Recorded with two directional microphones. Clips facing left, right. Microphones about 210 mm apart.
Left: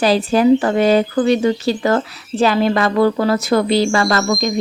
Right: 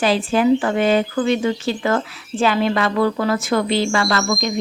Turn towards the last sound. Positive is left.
turn(degrees=40)  # may be behind; listen again after turning